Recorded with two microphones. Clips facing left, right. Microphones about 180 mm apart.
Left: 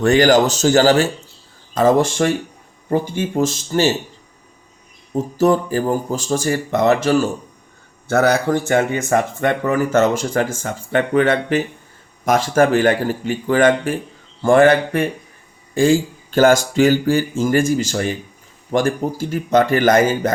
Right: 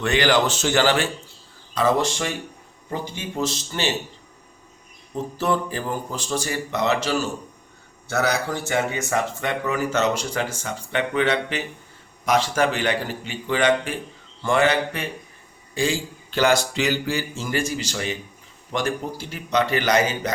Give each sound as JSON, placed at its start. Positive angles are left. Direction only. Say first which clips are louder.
{"t": 0.0, "sound": "speech", "louder": "left 7 dB", "side_deg": 45}
{"t": 5.1, "sound": "speech", "louder": "left 8 dB", "side_deg": 45}